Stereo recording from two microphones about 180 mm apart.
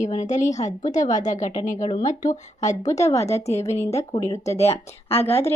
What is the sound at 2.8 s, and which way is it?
Speech, 15° left (ahead or behind).